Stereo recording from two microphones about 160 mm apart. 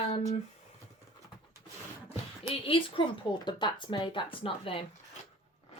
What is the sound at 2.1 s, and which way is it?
Speech, 35° left (ahead or behind).